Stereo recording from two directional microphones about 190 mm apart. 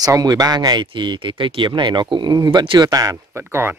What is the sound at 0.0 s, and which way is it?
Speech, 20° right (ahead or behind).